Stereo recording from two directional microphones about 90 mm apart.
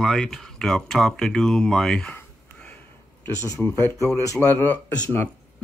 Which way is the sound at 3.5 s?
25° left (ahead or behind).